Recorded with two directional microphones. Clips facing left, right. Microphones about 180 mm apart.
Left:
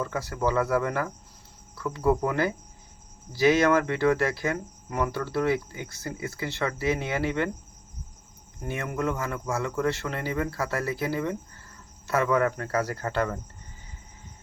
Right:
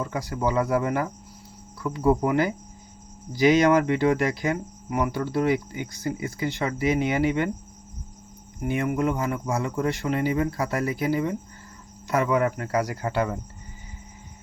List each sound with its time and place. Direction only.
0.0 s speech: 15° right (ahead or behind)
8.6 s speech: 15° right (ahead or behind)